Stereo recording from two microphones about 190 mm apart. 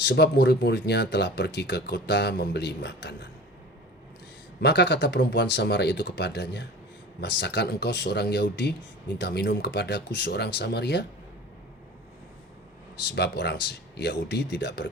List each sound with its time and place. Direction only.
0.0 s speech: 60° left (ahead or behind)
4.6 s speech: 65° left (ahead or behind)
13.1 s speech: 60° left (ahead or behind)